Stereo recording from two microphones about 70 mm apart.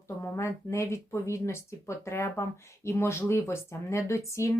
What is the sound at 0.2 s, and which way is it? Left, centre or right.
Speech, left.